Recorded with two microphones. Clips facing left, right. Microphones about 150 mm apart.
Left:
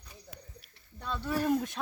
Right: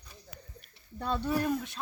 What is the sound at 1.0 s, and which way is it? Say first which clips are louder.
Speech: right 5 dB; 35° right (ahead or behind).